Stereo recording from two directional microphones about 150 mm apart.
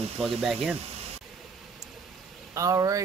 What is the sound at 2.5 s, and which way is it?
Speech, 20° right (ahead or behind).